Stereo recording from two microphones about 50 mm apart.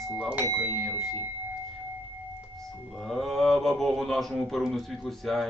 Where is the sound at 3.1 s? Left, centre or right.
Centre.